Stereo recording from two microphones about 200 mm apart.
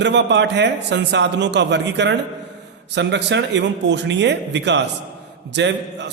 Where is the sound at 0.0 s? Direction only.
60° right (ahead or behind).